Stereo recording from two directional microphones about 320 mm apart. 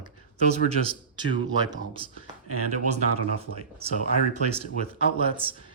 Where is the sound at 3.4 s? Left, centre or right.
Centre.